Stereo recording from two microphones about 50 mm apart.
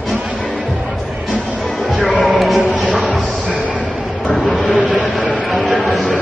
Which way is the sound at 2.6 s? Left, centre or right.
Right.